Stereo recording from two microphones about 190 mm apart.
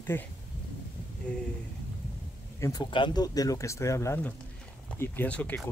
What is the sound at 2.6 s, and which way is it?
Speech, 20° left (ahead or behind).